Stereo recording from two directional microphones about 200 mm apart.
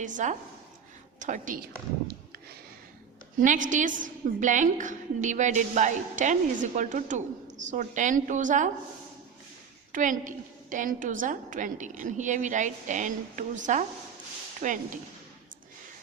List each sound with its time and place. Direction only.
0.0 s a woman's voice: 40° right (ahead or behind)
3.4 s a woman's voice: 40° right (ahead or behind)
9.9 s a woman's voice: 40° right (ahead or behind)